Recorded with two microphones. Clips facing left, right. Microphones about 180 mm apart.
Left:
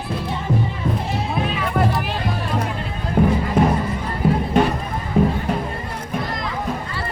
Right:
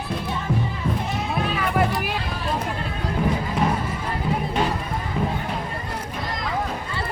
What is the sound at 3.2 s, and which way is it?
Music, 55° left (ahead or behind).